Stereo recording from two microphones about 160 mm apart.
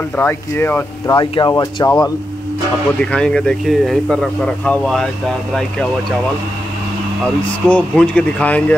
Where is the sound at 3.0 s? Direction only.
5° left (ahead or behind).